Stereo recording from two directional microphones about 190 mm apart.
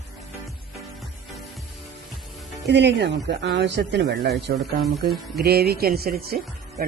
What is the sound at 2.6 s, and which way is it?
Speech, 65° right (ahead or behind).